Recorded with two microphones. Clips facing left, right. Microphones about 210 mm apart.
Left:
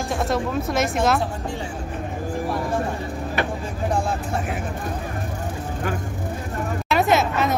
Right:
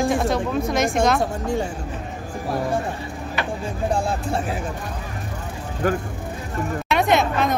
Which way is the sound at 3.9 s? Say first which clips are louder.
Right 1 dB; 30° right (ahead or behind).